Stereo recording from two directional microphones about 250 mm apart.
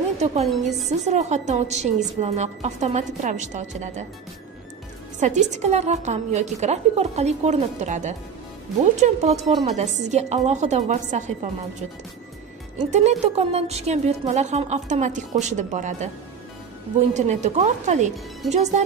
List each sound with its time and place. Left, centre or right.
0.2 s a woman's voice: right
5.2 s a woman's voice: right
12.7 s a woman's voice: right
17.1 s a woman's voice: right